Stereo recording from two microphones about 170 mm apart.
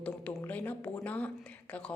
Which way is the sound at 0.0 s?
10° left (ahead or behind).